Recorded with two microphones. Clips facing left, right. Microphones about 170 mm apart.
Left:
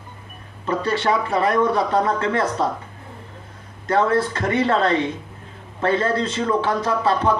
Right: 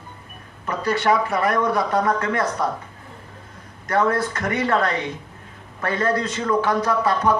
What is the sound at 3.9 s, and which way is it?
A man's voice, 25° left (ahead or behind).